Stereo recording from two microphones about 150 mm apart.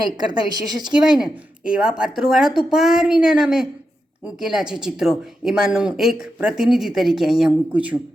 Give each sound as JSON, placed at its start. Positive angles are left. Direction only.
{"t": 0.3, "sound": "a woman's voice", "side_deg": -30}
{"t": 0.9, "sound": "speech", "side_deg": -5}